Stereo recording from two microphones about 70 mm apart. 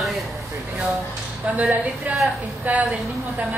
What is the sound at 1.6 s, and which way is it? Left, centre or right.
A woman's voice, right.